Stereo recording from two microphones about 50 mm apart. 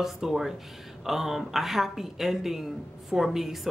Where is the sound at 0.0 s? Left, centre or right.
Centre.